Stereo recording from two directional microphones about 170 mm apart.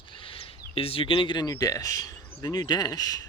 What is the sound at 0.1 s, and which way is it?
Speech, 30° left (ahead or behind).